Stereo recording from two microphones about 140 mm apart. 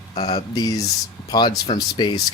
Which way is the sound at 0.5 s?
25° left (ahead or behind).